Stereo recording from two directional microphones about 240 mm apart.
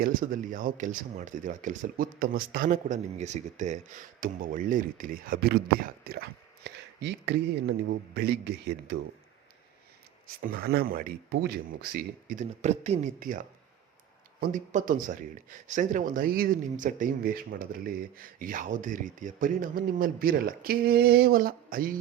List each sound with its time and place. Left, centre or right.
0.0 s a man's voice: right
10.4 s a man's voice: right
14.4 s a man's voice: right